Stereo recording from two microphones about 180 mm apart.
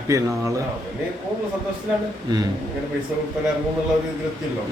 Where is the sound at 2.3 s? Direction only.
20° right (ahead or behind).